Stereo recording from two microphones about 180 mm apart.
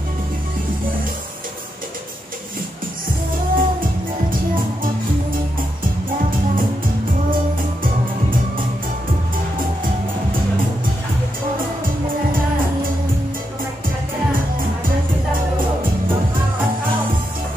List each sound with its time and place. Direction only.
3.5 s music: 50° right (ahead or behind)